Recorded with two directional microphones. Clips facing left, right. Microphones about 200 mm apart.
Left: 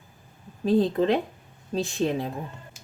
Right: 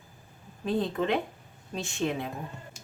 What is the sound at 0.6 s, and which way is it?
Speech, 35° left (ahead or behind).